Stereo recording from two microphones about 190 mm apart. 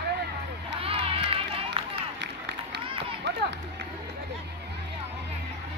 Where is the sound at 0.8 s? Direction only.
30° right (ahead or behind).